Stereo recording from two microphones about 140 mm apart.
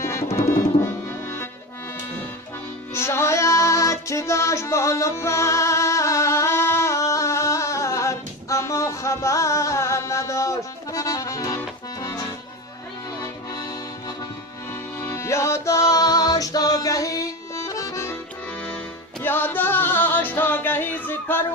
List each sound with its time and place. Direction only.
0.0 s music: 20° left (ahead or behind)
2.9 s music: 20° left (ahead or behind)
11.9 s accordion: 25° left (ahead or behind)
13.2 s accordion: 25° left (ahead or behind)
14.7 s music: 20° left (ahead or behind)
19.2 s music: 15° left (ahead or behind)